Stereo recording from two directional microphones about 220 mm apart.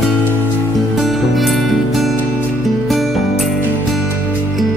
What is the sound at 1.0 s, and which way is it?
Music, centre (ahead or behind).